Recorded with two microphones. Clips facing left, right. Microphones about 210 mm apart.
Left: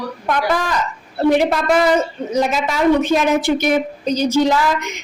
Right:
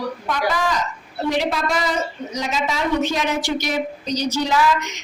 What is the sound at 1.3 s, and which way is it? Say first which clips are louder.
Speech: left 6 dB; 55° left (ahead or behind).